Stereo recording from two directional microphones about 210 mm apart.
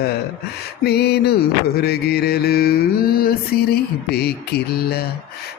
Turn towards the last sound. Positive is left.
turn(degrees=50)  # may be behind; listen again after turning